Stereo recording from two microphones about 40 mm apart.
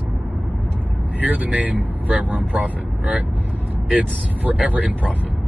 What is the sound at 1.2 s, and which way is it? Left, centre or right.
Speech, right.